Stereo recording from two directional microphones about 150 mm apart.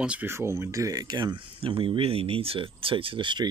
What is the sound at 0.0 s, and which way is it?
Speech, 10° right (ahead or behind).